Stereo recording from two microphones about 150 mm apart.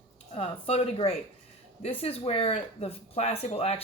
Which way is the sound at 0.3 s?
40° left (ahead or behind).